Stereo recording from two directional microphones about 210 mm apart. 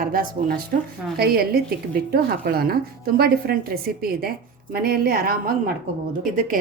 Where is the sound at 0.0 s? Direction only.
45° right (ahead or behind).